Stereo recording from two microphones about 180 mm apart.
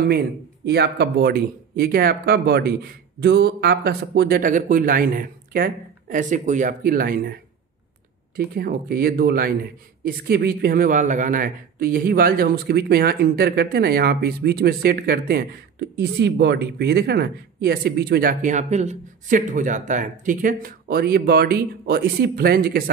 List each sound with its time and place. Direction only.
0.7 s speech: 65° right (ahead or behind)
8.5 s speech: 55° right (ahead or behind)
16.0 s speech: 70° right (ahead or behind)